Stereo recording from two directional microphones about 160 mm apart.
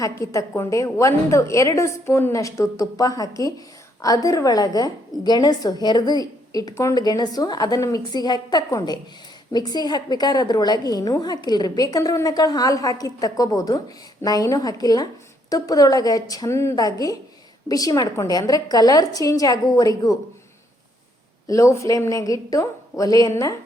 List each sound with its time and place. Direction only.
0.0 s a woman's voice: 20° left (ahead or behind)
21.4 s a woman's voice: 20° left (ahead or behind)